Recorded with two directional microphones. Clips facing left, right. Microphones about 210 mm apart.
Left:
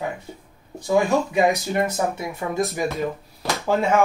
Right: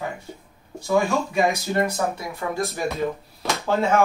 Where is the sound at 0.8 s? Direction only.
20° left (ahead or behind).